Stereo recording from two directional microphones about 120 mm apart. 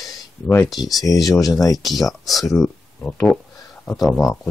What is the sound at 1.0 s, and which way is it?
Speech, 30° left (ahead or behind).